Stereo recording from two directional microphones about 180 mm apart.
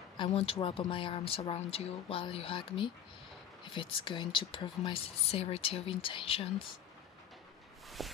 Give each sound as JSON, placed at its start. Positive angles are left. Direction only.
{"t": 0.2, "sound": "speech", "side_deg": 30}
{"t": 8.0, "sound": "walk", "side_deg": 0}